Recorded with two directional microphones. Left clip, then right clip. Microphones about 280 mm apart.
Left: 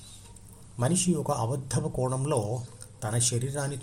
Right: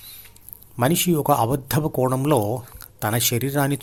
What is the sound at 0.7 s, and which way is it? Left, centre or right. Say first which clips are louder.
Speech: right 9 dB; right.